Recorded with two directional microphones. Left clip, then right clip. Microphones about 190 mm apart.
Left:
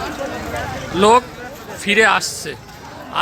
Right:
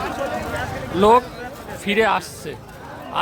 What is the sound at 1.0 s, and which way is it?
Speech, 5° right (ahead or behind).